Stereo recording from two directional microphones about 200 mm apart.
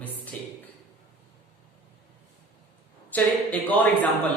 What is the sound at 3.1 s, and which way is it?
A woman's voice, 10° left (ahead or behind).